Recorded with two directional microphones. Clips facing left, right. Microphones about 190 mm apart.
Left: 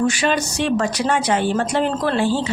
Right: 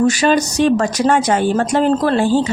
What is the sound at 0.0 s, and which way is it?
A woman's voice, 40° right (ahead or behind).